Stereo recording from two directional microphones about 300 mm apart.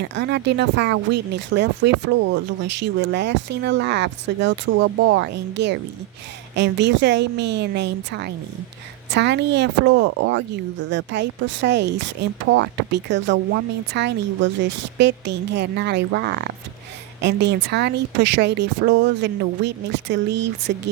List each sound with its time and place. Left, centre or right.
0.0 s speech: right